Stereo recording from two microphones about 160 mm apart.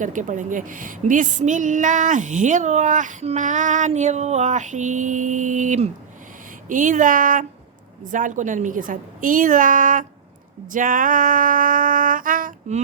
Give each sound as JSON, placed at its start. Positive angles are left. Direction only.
{"t": 0.0, "sound": "a woman's voice", "side_deg": -50}
{"t": 10.7, "sound": "music", "side_deg": -60}